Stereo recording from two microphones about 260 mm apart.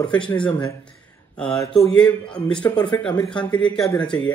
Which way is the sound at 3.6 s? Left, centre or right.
Centre.